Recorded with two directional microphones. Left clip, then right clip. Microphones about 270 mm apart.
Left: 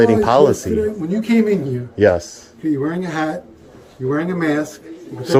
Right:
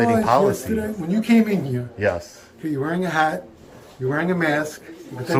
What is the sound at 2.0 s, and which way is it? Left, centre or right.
Speech, left.